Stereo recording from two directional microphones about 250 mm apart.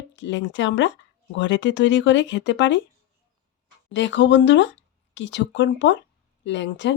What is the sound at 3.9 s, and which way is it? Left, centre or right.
Speech, left.